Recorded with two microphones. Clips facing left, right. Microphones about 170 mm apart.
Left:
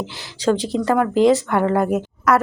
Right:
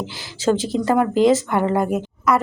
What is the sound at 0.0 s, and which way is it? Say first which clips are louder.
Speech: even; centre (ahead or behind).